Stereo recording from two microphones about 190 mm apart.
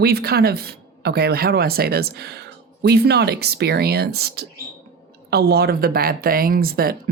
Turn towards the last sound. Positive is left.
turn(degrees=-50)  # may be behind; listen again after turning